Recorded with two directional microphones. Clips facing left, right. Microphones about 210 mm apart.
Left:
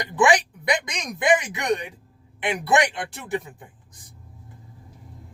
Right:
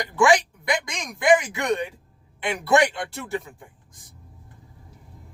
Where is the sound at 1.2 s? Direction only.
15° left (ahead or behind).